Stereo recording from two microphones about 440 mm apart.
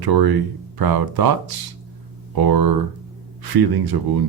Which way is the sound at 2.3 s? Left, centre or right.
Right.